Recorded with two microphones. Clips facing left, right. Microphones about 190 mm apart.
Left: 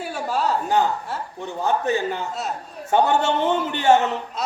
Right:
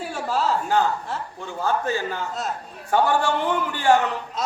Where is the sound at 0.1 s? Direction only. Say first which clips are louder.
Even; 5° left (ahead or behind).